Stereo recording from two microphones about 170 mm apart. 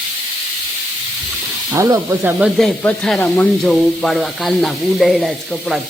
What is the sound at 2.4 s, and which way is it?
Speech, 5° left (ahead or behind).